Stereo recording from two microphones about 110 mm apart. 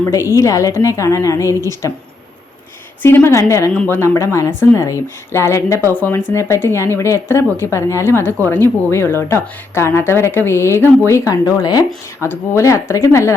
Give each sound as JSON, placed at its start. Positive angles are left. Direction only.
{"t": 0.0, "sound": "a woman's voice", "side_deg": 25}
{"t": 3.0, "sound": "a woman's voice", "side_deg": 20}